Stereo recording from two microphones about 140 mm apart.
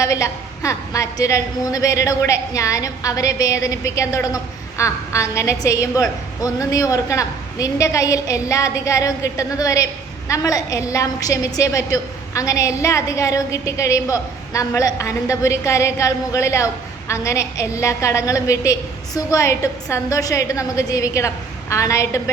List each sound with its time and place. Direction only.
0.0 s a woman's voice: 25° left (ahead or behind)